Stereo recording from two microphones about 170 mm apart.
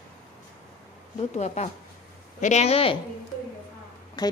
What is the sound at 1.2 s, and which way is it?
A woman's voice, 40° left (ahead or behind).